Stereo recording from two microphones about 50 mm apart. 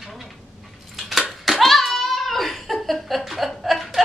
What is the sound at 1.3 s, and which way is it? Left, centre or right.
Hands, centre.